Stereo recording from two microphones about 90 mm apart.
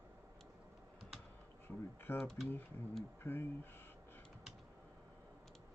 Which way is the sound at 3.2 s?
25° left (ahead or behind).